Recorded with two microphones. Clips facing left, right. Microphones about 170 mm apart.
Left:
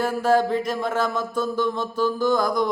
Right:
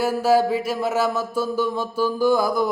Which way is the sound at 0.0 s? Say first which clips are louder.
Right 2 dB; 5° right (ahead or behind).